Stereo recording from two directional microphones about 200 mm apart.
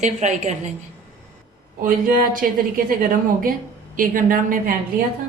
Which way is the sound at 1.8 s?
45° right (ahead or behind).